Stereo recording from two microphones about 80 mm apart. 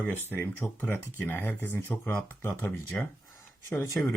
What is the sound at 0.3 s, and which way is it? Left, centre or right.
Speech, left.